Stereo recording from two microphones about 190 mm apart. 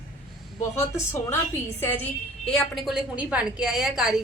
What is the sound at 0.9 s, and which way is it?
A woman's voice, 15° left (ahead or behind).